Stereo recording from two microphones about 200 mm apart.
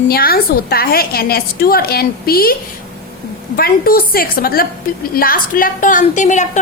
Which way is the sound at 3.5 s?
45° left (ahead or behind).